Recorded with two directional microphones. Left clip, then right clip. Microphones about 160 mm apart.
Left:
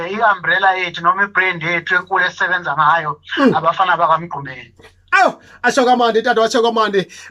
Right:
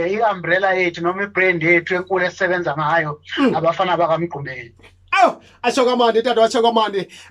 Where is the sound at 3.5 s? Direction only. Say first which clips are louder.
Left 3 dB; 40° right (ahead or behind).